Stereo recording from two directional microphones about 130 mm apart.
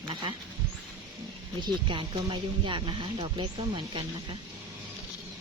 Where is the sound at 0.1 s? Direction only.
35° right (ahead or behind).